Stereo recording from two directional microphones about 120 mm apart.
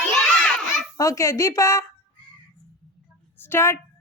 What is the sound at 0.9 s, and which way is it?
Speech, 25° left (ahead or behind).